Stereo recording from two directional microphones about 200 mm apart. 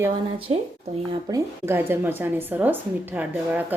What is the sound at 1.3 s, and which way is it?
A woman's voice, 10° right (ahead or behind).